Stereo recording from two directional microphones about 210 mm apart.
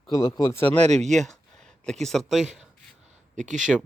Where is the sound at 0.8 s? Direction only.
30° right (ahead or behind).